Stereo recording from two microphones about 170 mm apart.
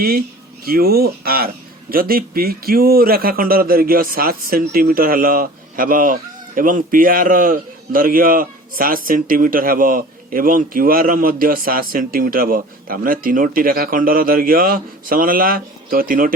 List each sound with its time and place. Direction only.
0.6 s a man's voice: 65° right (ahead or behind)